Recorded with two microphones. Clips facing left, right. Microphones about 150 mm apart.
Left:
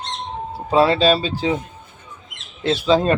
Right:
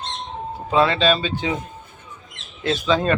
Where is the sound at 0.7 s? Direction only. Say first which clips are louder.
Left 3 dB; 40° left (ahead or behind).